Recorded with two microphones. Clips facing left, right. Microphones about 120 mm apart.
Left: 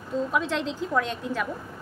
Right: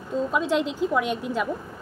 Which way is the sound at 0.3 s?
15° right (ahead or behind).